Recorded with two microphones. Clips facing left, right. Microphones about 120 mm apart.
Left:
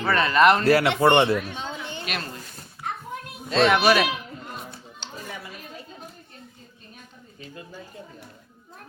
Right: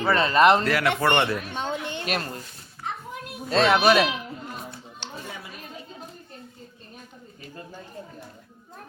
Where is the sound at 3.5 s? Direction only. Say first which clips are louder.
Left 1 dB; 40° right (ahead or behind).